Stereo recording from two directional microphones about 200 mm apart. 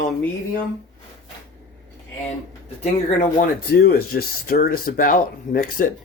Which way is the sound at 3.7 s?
50° left (ahead or behind).